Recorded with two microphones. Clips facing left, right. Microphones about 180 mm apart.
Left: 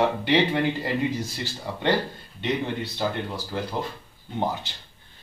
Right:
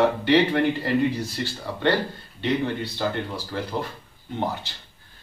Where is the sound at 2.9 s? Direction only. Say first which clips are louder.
Right 1 dB; 20° left (ahead or behind).